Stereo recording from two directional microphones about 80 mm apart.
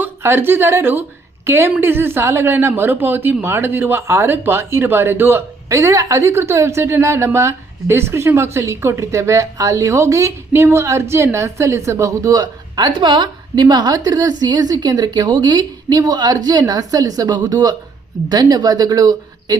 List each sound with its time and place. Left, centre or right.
0.0 s a woman's voice: right
5.6 s a woman's voice: right